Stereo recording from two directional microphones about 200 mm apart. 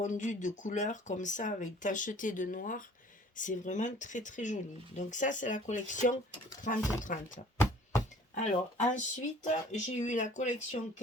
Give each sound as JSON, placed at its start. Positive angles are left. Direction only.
{"t": 0.0, "sound": "speech", "side_deg": 40}
{"t": 8.4, "sound": "speech", "side_deg": 35}